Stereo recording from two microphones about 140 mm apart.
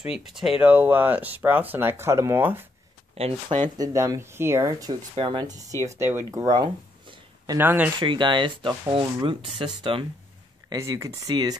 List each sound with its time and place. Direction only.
0.0 s speech: 5° right (ahead or behind)
3.2 s speech: 45° right (ahead or behind)
3.7 s speech: 25° right (ahead or behind)
5.1 s speech: 35° right (ahead or behind)
5.9 s speech: 20° right (ahead or behind)
7.5 s speech: 15° right (ahead or behind)
8.0 s speech: 35° right (ahead or behind)
10.7 s speech: 25° right (ahead or behind)